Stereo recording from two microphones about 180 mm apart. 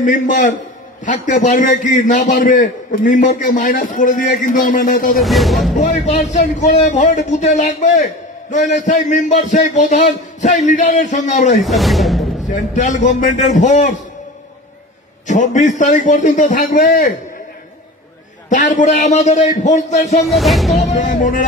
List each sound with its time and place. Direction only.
0.0 s a man's voice: 45° left (ahead or behind)
5.2 s music: centre (ahead or behind)
5.8 s a man's voice: 40° left (ahead or behind)
11.6 s speech: centre (ahead or behind)
12.4 s a man's voice: 45° left (ahead or behind)
15.2 s a man's voice: 40° left (ahead or behind)
18.5 s a man's voice: 45° left (ahead or behind)
20.2 s music: centre (ahead or behind)
20.8 s music: 45° left (ahead or behind)